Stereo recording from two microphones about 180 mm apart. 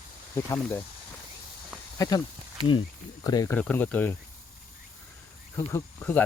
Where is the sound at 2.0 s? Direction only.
20° left (ahead or behind).